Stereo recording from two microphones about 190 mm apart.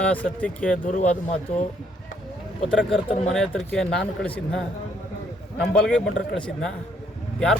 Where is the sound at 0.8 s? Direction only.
40° left (ahead or behind).